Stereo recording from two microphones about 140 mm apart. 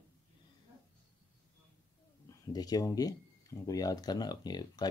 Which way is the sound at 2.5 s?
25° left (ahead or behind).